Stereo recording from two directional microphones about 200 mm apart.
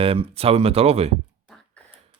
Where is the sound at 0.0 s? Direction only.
30° right (ahead or behind).